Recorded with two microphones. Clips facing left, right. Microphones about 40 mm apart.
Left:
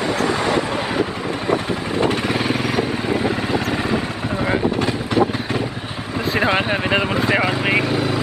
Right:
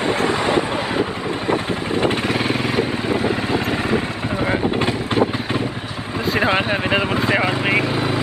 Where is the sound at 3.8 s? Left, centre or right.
Right.